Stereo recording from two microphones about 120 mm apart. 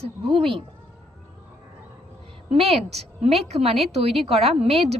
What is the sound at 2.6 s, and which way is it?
A woman's voice, 60° right (ahead or behind).